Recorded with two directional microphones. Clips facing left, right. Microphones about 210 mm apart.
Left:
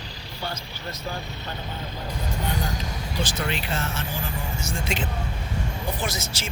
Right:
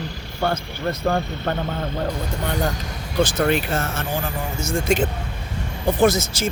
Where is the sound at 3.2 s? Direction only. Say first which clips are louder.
Right 11 dB; 50° right (ahead or behind).